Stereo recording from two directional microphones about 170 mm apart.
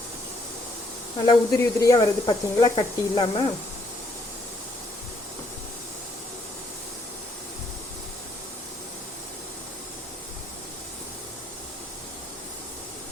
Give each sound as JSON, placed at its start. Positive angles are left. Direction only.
{"t": 1.3, "sound": "speech", "side_deg": 20}